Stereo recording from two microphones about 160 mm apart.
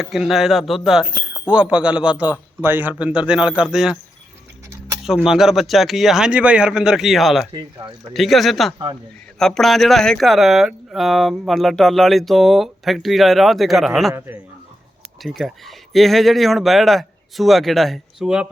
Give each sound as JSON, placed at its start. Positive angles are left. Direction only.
{"t": 0.0, "sound": "a man's voice", "side_deg": -5}
{"t": 5.0, "sound": "speech", "side_deg": -5}
{"t": 14.1, "sound": "a man's voice", "side_deg": -15}
{"t": 15.2, "sound": "speech", "side_deg": 0}